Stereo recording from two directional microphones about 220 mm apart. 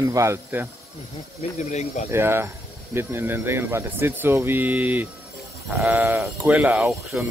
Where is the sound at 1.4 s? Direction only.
30° left (ahead or behind).